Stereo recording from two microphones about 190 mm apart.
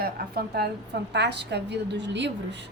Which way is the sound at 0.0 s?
55° right (ahead or behind).